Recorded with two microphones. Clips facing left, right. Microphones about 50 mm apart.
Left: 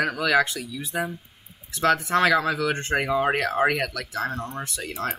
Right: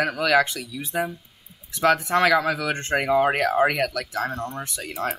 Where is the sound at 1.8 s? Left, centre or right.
Centre.